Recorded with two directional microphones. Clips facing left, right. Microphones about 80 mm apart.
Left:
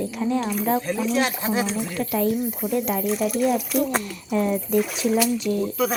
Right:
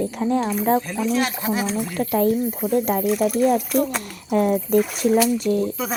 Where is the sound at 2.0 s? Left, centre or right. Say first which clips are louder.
Right 4 dB; right.